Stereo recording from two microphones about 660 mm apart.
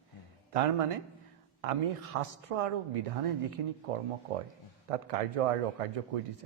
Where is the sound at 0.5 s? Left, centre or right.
Right.